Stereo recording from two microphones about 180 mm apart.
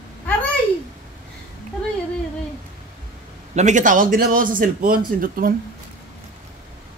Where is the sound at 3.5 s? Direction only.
45° right (ahead or behind).